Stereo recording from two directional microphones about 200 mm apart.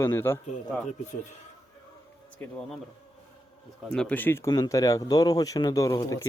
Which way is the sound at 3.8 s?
5° left (ahead or behind).